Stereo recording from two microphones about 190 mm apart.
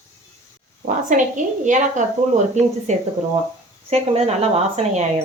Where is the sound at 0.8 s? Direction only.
40° right (ahead or behind).